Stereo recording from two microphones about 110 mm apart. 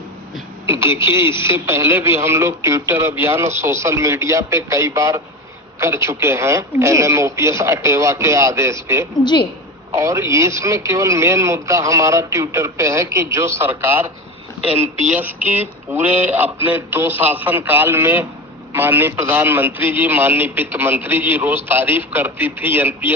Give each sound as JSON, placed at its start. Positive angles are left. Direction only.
{"t": 0.6, "sound": "a man's voice", "side_deg": -25}
{"t": 9.2, "sound": "a woman's voice", "side_deg": 45}
{"t": 9.9, "sound": "a man's voice", "side_deg": -30}
{"t": 15.1, "sound": "a man's voice", "side_deg": -15}